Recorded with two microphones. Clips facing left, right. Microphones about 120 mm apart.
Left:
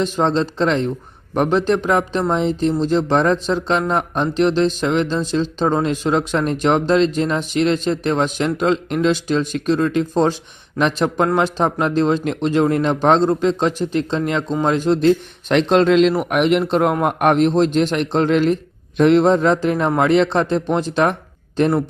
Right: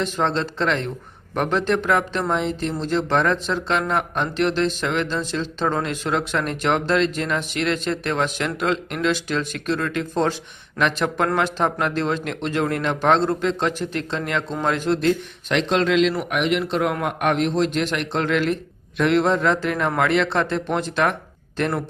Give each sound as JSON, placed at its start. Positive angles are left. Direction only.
{"t": 0.0, "sound": "speech", "side_deg": 20}
{"t": 15.5, "sound": "a man's voice", "side_deg": 40}